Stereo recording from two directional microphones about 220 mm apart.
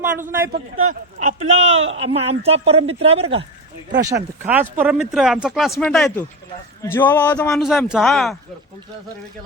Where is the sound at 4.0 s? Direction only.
15° right (ahead or behind); by 8.3 s centre (ahead or behind).